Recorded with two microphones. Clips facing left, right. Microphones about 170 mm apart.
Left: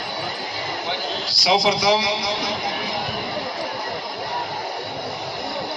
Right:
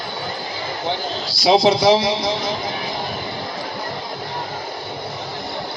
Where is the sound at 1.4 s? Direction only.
25° right (ahead or behind).